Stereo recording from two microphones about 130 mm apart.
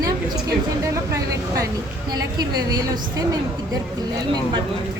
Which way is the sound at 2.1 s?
30° right (ahead or behind).